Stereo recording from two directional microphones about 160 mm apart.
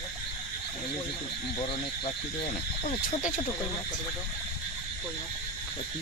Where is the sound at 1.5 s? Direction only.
35° left (ahead or behind).